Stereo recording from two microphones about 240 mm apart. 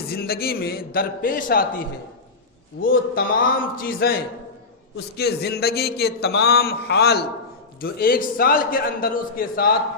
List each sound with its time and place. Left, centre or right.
0.1 s a man's voice: left
2.8 s a man's voice: left